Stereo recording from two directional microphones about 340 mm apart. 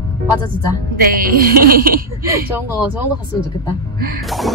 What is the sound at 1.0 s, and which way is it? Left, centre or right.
Speech, right.